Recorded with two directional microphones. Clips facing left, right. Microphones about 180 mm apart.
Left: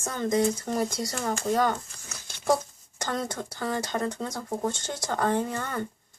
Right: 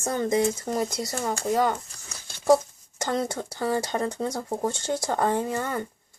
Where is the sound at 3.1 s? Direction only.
25° right (ahead or behind).